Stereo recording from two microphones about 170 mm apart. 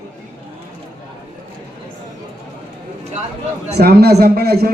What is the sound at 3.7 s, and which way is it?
Speech, 65° right (ahead or behind).